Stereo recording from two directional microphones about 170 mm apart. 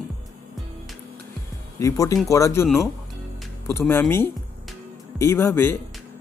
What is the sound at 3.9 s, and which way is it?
Speech, 15° left (ahead or behind).